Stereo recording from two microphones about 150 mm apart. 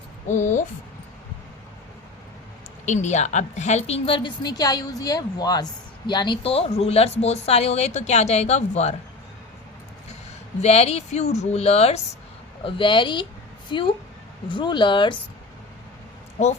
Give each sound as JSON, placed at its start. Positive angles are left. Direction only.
{"t": 0.3, "sound": "speech", "side_deg": 55}
{"t": 2.8, "sound": "a woman's voice", "side_deg": 50}
{"t": 10.6, "sound": "a woman's voice", "side_deg": 45}
{"t": 12.6, "sound": "a woman's voice", "side_deg": 35}